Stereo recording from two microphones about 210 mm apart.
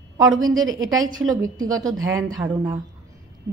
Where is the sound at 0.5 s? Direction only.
70° right (ahead or behind).